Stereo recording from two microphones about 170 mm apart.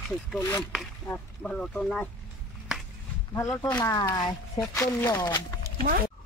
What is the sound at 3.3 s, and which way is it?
Speech, 15° left (ahead or behind).